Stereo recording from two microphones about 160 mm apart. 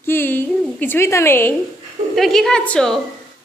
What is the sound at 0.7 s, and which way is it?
Speech, 15° left (ahead or behind).